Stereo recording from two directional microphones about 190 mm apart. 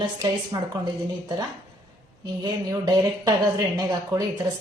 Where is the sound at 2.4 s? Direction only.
20° right (ahead or behind).